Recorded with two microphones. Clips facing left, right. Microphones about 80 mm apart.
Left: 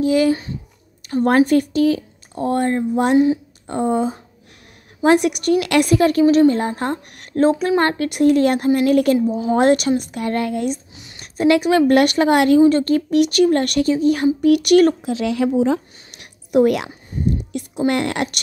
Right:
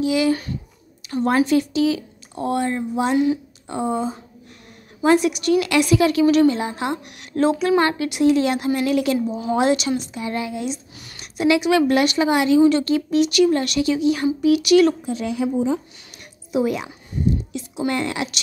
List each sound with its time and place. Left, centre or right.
0.0 s a child's voice: left
0.3 s a child's voice: left
1.0 s a woman's voice: left
5.0 s a woman's voice: left
15.0 s speech: left
16.5 s a woman's voice: left
17.1 s a sound: left